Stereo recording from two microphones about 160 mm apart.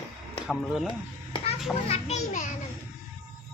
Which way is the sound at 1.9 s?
45° left (ahead or behind).